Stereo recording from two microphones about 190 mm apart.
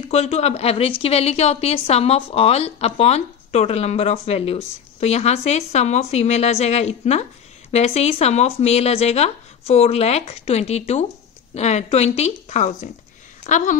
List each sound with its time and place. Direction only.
0.1 s a woman's voice: 35° left (ahead or behind)